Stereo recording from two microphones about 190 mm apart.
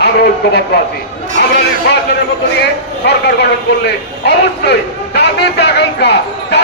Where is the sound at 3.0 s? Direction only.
60° left (ahead or behind).